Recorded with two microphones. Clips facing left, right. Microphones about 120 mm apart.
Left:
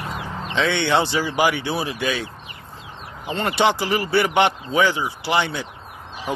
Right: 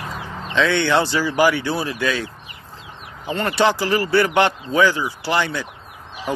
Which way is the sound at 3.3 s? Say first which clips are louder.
Right 1 dB; 25° left (ahead or behind).